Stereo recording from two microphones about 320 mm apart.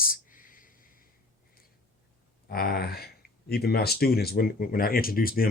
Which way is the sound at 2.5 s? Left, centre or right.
Left.